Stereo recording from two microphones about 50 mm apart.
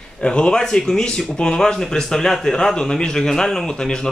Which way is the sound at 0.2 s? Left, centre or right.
Centre.